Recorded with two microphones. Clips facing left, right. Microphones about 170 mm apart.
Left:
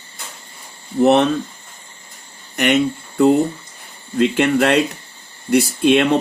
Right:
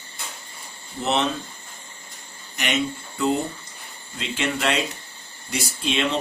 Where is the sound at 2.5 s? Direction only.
55° left (ahead or behind).